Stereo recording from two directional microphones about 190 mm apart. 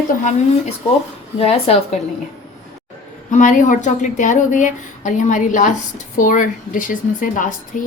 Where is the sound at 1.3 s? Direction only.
30° left (ahead or behind).